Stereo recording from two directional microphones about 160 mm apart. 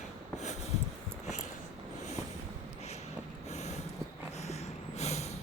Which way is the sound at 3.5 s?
45° left (ahead or behind).